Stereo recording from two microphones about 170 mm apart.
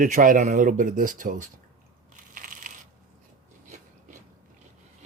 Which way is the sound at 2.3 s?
55° right (ahead or behind).